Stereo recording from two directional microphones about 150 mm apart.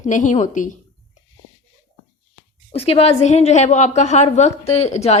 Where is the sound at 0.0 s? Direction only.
55° left (ahead or behind).